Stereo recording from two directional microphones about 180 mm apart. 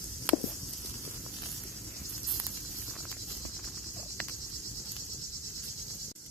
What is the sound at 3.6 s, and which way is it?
Cricket, centre (ahead or behind).